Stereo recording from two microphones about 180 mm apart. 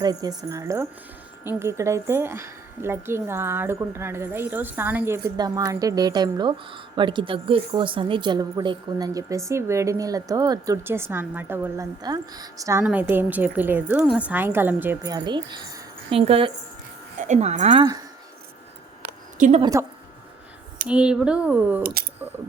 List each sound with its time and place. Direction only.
0.0 s a woman's voice: 20° right (ahead or behind)
15.1 s a woman's voice: 25° right (ahead or behind)
19.4 s a woman's voice: 40° right (ahead or behind)
20.8 s a woman's voice: 5° right (ahead or behind)